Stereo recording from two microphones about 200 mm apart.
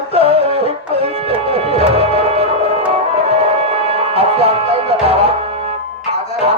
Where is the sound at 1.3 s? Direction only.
30° right (ahead or behind).